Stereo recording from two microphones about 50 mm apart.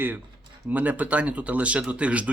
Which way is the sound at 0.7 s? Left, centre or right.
Right.